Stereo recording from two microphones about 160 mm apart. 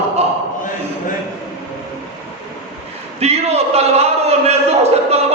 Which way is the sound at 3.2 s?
40° right (ahead or behind).